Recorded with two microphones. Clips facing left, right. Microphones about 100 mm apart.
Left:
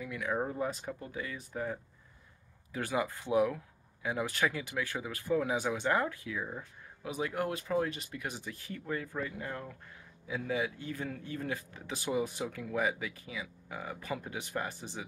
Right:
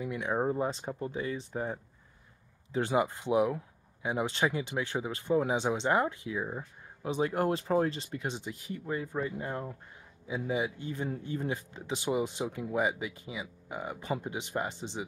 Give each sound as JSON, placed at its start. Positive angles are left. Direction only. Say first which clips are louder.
{"t": 0.0, "sound": "speech", "louder": "right 4 dB", "side_deg": -25}